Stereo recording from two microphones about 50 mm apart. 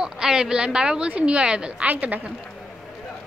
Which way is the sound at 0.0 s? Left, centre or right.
Centre.